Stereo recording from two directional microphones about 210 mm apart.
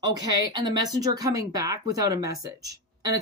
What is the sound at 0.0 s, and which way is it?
Speech, 20° right (ahead or behind).